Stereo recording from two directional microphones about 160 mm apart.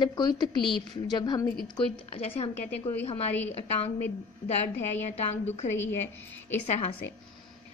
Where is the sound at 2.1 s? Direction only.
40° left (ahead or behind).